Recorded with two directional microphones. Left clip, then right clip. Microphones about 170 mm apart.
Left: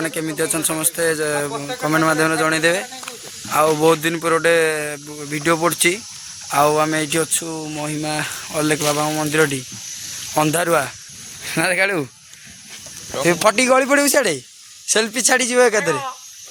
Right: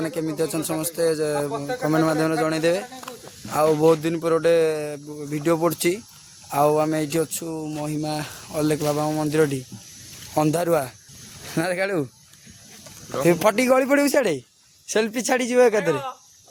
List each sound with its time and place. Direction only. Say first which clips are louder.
0.0 s speech: left 3 dB; centre (ahead or behind)
13.2 s speech: left 3 dB; 15° right (ahead or behind)